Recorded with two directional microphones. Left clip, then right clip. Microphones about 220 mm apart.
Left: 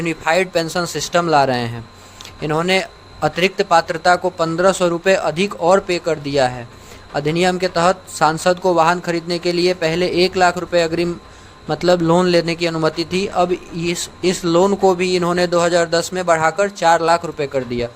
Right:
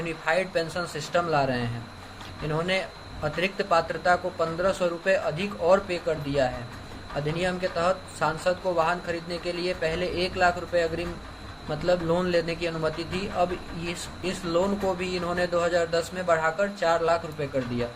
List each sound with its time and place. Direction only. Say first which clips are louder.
0.0 s a man's voice: left 9 dB; 55° left (ahead or behind)